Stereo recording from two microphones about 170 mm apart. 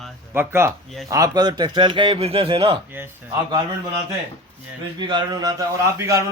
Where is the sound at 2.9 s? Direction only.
15° right (ahead or behind).